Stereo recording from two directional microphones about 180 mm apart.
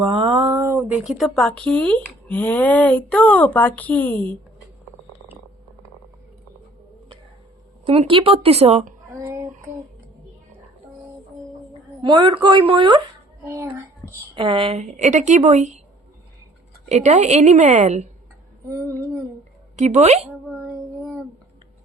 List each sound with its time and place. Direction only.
0.0 s speech: 30° right (ahead or behind); by 4.4 s 5° left (ahead or behind)
7.9 s speech: 30° right (ahead or behind)
9.1 s speech: 15° right (ahead or behind)
12.0 s speech: 25° right (ahead or behind)
13.4 s a child's voice: 10° right (ahead or behind)
14.3 s speech: 30° right (ahead or behind)
16.9 s speech: 40° right (ahead or behind)
19.7 s speech: 40° right (ahead or behind)
20.2 s child singing: 5° right (ahead or behind)